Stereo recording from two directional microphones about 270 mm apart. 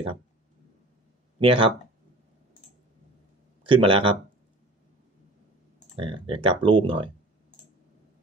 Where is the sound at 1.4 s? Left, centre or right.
Centre.